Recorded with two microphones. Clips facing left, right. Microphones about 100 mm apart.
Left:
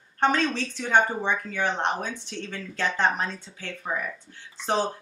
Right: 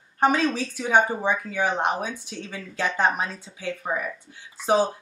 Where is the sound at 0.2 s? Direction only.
10° right (ahead or behind).